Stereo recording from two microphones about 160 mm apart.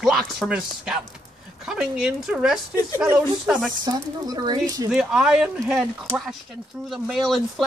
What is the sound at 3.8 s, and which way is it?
Speech, 25° right (ahead or behind).